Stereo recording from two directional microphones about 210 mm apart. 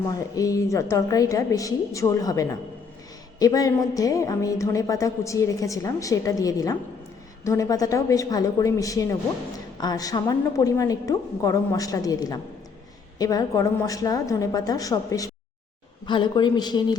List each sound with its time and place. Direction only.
0.3 s a woman's voice: 15° left (ahead or behind)